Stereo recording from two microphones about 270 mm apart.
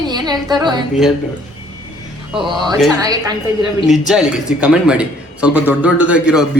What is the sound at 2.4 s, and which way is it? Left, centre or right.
Speech, centre.